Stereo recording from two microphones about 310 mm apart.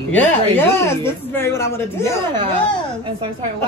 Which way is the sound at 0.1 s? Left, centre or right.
Centre.